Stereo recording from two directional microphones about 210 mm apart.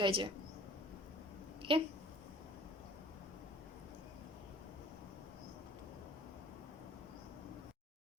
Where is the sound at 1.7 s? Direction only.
25° right (ahead or behind).